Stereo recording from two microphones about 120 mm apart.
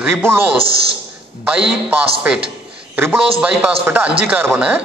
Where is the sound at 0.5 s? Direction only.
50° right (ahead or behind).